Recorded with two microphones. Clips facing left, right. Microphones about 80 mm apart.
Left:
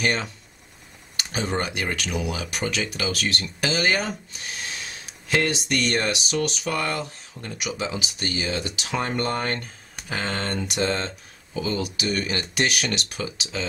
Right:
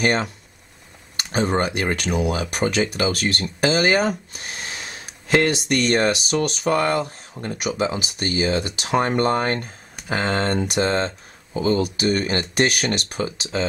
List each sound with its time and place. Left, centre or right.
0.0 s speech: right
10.2 s speech: right
10.5 s speech: right